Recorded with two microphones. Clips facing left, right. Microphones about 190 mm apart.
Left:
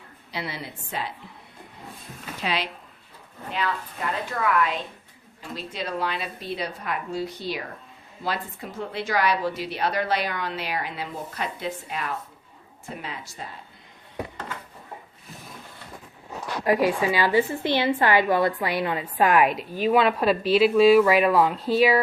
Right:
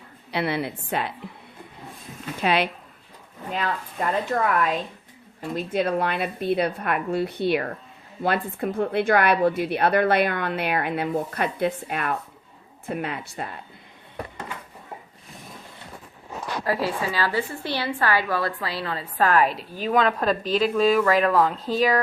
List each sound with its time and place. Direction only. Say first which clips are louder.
0.3 s a woman's voice: right 8 dB; 60° right (ahead or behind)
2.4 s a woman's voice: right 6 dB; 55° right (ahead or behind)
4.3 s a woman's voice: left 1 dB; 45° right (ahead or behind); by 13.6 s 60° right (ahead or behind)
16.6 s a woman's voice: left 5 dB; 15° left (ahead or behind)